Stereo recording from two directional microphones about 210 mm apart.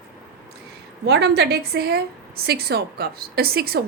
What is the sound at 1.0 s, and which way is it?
A woman's voice, 55° right (ahead or behind).